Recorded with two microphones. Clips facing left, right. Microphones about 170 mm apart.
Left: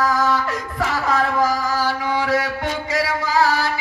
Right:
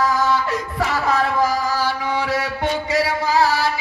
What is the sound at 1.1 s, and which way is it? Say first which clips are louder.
Mantra: left 1 dB; 45° left (ahead or behind).